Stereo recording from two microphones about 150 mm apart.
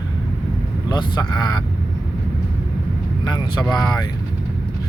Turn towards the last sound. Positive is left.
turn(degrees=25)  # may be behind; listen again after turning